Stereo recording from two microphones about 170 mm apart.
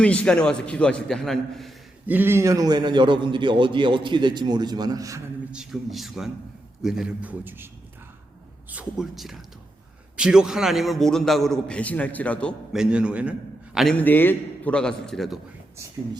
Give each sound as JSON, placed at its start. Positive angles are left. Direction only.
{"t": 0.0, "sound": "a man's voice", "side_deg": 5}
{"t": 2.0, "sound": "a man's voice", "side_deg": -10}
{"t": 5.5, "sound": "a man's voice", "side_deg": -5}
{"t": 8.7, "sound": "a man's voice", "side_deg": -5}
{"t": 13.7, "sound": "a man's voice", "side_deg": 5}